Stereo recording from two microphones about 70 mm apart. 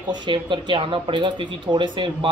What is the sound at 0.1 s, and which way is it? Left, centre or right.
Speech, right.